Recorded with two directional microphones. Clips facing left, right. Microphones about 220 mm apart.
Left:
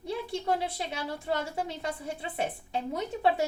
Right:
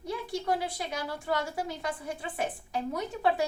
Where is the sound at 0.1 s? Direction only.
25° left (ahead or behind).